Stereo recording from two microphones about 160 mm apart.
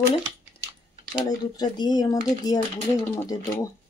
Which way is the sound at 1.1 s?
25° left (ahead or behind).